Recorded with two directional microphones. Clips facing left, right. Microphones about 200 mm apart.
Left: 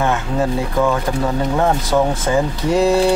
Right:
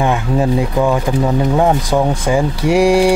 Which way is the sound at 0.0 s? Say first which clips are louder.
Right 3 dB; 15° right (ahead or behind).